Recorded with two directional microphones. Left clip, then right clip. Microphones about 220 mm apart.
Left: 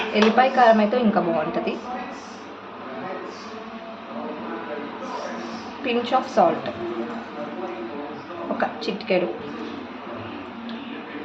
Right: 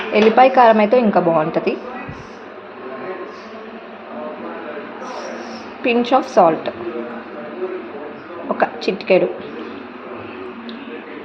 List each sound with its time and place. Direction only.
0.1 s a woman's voice: 30° right (ahead or behind)
5.8 s a woman's voice: 30° right (ahead or behind)
8.5 s a woman's voice: 30° right (ahead or behind)